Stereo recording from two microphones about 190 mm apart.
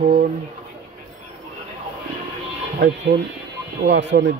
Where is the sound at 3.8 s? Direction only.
65° right (ahead or behind).